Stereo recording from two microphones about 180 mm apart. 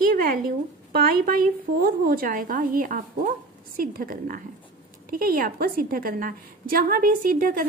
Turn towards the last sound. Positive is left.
turn(degrees=-50)  # may be behind; listen again after turning